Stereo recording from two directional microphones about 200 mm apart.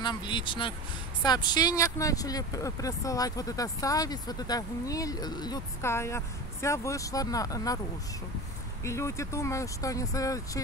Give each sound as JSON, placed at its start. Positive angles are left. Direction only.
{"t": 0.0, "sound": "speech", "side_deg": 20}
{"t": 8.8, "sound": "speech", "side_deg": 15}